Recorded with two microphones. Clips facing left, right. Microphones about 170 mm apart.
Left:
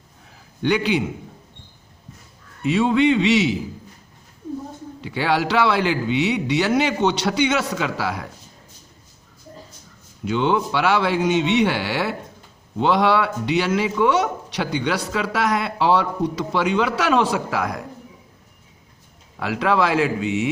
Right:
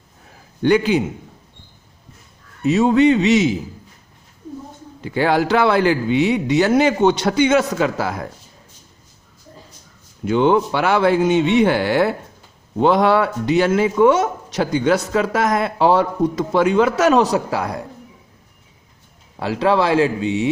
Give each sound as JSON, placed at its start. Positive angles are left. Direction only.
{"t": 0.6, "sound": "a man's voice", "side_deg": -45}
{"t": 2.6, "sound": "a man's voice", "side_deg": -40}
{"t": 4.9, "sound": "a man's voice", "side_deg": -45}
{"t": 10.2, "sound": "a man's voice", "side_deg": -50}
{"t": 19.4, "sound": "speech", "side_deg": -30}